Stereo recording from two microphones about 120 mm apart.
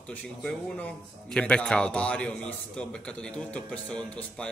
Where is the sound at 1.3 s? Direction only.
10° left (ahead or behind).